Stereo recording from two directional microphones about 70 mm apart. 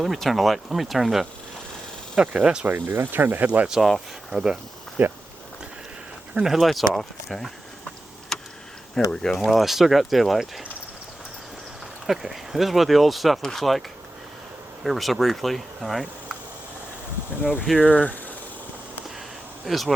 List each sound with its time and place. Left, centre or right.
0.0 s speech: centre
2.1 s speech: centre
2.6 s speech: right
3.7 s speech: centre
5.0 s speech: right
6.4 s speech: centre
8.3 s tick: centre
9.0 s speech: centre
12.0 s speech: centre
14.8 s speech: centre
17.4 s speech: centre
18.0 s a sound: left
19.6 s speech: centre